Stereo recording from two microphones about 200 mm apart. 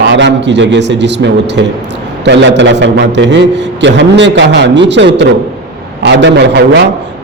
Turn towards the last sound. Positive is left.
turn(degrees=-60)  # may be behind; listen again after turning